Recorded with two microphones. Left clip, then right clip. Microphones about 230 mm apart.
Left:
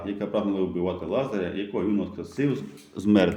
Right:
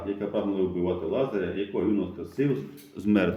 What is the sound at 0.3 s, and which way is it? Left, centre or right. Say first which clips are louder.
A man's voice: left 2 dB; left.